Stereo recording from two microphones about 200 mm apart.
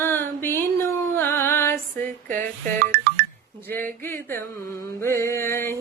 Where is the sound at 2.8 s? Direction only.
50° right (ahead or behind).